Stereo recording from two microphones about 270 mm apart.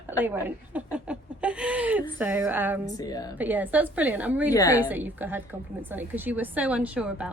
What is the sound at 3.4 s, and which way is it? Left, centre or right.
A woman's voice, centre.